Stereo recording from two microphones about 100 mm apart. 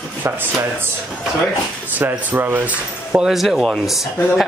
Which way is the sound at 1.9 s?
20° right (ahead or behind).